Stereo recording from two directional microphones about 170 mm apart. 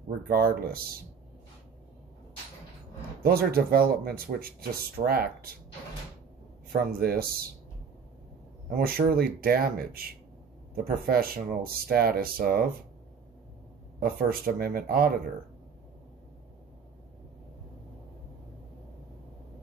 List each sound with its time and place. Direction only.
0.3 s speech: 60° right (ahead or behind)
3.2 s speech: 60° right (ahead or behind)
6.7 s speech: 60° right (ahead or behind)
8.6 s speech: 60° right (ahead or behind)
13.9 s speech: 60° right (ahead or behind)